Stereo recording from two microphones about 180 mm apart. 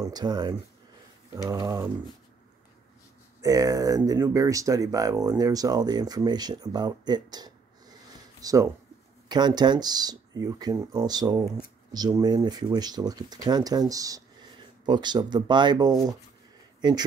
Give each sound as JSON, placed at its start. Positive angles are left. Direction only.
{"t": 0.0, "sound": "speech", "side_deg": -20}
{"t": 3.3, "sound": "speech", "side_deg": -20}